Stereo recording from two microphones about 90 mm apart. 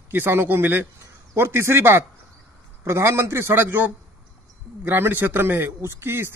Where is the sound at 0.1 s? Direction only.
25° right (ahead or behind).